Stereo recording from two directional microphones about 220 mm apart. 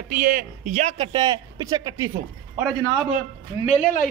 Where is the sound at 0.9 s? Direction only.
20° right (ahead or behind).